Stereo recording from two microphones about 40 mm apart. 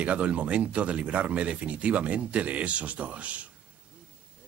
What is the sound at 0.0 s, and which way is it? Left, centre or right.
Speech, right.